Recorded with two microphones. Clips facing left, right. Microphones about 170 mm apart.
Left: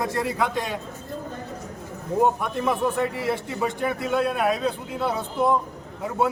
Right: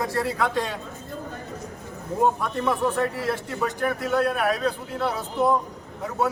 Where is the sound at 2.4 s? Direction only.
15° left (ahead or behind).